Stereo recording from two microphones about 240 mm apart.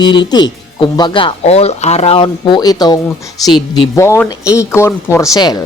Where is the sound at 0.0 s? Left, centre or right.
Centre.